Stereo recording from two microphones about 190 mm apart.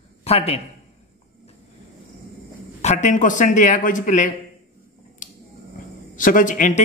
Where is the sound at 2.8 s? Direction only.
35° left (ahead or behind).